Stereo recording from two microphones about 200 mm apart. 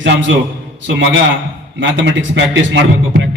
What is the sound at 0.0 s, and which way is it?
Speech, 65° right (ahead or behind).